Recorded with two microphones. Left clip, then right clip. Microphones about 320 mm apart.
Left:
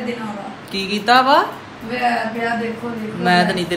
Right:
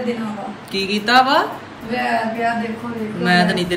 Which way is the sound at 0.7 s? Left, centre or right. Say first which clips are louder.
Even; centre.